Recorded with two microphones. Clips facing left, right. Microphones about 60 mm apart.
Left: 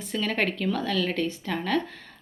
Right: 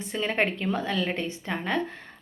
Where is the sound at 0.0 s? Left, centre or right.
Right.